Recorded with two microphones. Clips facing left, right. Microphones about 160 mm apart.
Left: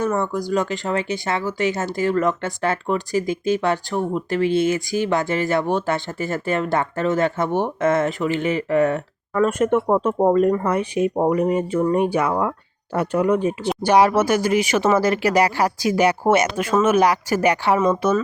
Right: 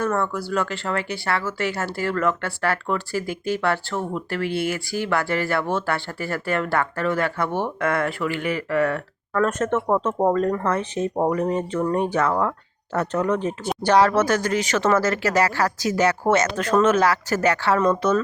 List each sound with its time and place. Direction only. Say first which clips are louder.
0.0 s speech: left 2 dB; 15° left (ahead or behind)
9.3 s speech: left 3 dB; 10° left (ahead or behind)